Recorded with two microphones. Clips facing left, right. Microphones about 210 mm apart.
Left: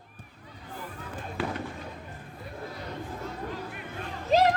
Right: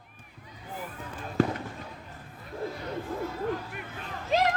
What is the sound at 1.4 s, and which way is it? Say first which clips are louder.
Fireworks: right 7 dB; 45° right (ahead or behind).